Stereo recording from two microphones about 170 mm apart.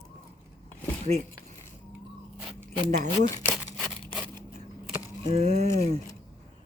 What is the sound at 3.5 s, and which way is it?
Tearing, centre (ahead or behind).